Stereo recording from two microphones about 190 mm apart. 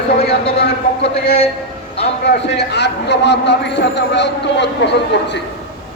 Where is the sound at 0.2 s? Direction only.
30° left (ahead or behind).